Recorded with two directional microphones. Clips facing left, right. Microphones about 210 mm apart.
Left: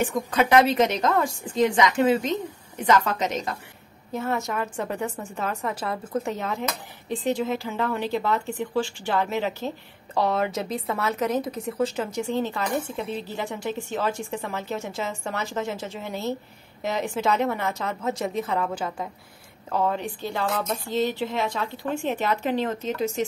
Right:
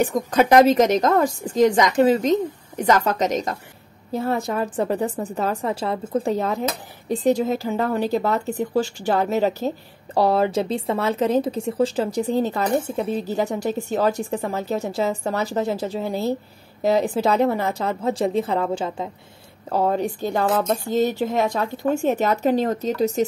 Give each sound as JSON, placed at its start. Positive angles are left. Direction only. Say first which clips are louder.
{"t": 0.0, "sound": "speech", "louder": "right 5 dB", "side_deg": -40}
{"t": 19.7, "sound": "a woman's voice", "louder": "right 5 dB", "side_deg": -40}